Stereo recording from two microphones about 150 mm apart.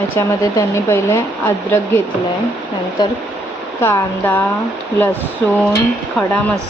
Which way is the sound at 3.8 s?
15° left (ahead or behind).